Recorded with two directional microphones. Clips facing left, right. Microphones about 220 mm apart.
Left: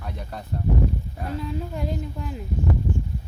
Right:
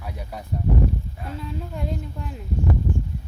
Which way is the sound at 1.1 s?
45° left (ahead or behind).